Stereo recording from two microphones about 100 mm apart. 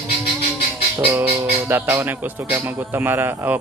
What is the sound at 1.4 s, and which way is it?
Speech, 20° right (ahead or behind).